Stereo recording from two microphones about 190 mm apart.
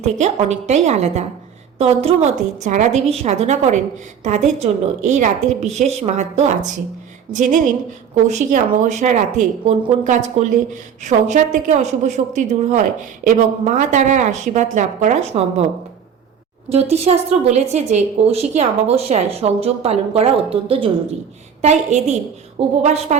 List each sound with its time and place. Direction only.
0.0 s a woman's voice: 35° right (ahead or behind)
16.6 s a woman's voice: 35° right (ahead or behind)